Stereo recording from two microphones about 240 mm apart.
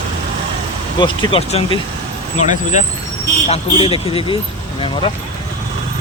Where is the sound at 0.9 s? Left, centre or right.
Centre.